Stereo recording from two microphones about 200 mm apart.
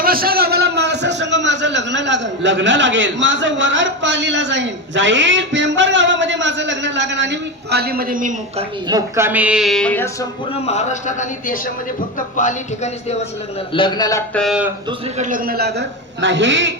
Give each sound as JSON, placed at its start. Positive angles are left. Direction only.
{"t": 0.0, "sound": "a man's voice", "side_deg": -45}
{"t": 8.9, "sound": "a woman's voice", "side_deg": -15}
{"t": 10.5, "sound": "a man's voice", "side_deg": 35}
{"t": 13.7, "sound": "a man's voice", "side_deg": 20}
{"t": 14.3, "sound": "a woman's voice", "side_deg": 0}
{"t": 15.2, "sound": "a man's voice", "side_deg": -45}